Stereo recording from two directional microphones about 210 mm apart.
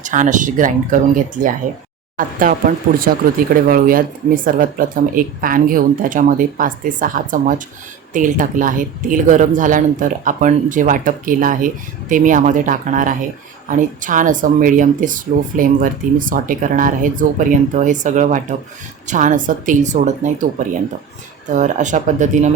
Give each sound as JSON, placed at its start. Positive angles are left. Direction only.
{"t": 0.0, "sound": "speech", "side_deg": -35}
{"t": 21.5, "sound": "speech", "side_deg": -35}